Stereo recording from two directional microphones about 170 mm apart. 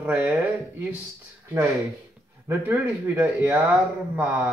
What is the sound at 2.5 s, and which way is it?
Speech, 10° right (ahead or behind).